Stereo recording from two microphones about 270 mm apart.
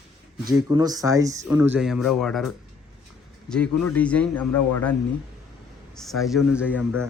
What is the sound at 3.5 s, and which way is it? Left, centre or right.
A man's voice, centre.